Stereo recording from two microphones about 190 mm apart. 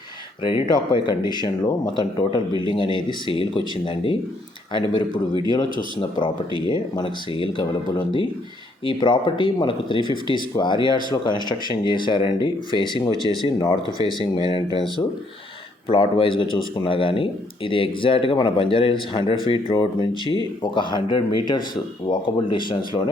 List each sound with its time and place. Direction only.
0.4 s speech: 25° left (ahead or behind)
14.2 s speech: 25° left (ahead or behind)